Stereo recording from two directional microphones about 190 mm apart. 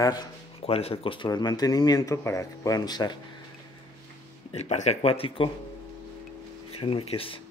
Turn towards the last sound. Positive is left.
turn(degrees=30)  # may be behind; listen again after turning